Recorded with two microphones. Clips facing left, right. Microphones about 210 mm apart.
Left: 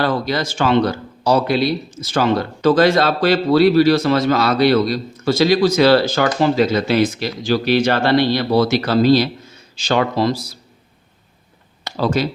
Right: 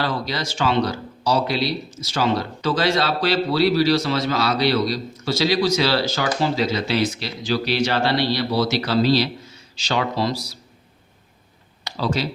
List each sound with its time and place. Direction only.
0.0 s speech: 50° left (ahead or behind)
11.9 s speech: 50° left (ahead or behind)